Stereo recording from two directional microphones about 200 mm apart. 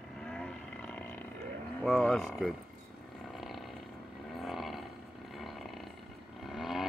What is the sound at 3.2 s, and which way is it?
Roaring cats, centre (ahead or behind).